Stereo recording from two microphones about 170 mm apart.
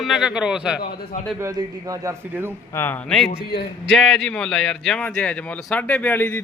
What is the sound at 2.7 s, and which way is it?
A man's voice, 10° left (ahead or behind).